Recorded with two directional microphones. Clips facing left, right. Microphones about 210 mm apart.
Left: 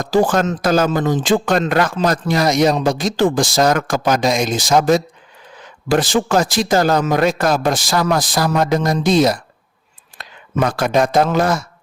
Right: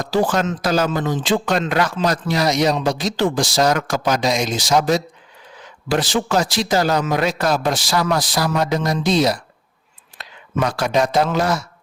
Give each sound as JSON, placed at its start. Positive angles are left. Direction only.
{"t": 0.0, "sound": "speech", "side_deg": 50}